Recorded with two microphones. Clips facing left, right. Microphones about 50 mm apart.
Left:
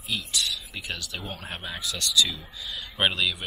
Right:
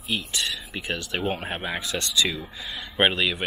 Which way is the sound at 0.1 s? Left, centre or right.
Right.